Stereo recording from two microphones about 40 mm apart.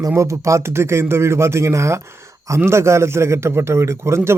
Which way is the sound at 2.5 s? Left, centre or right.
Right.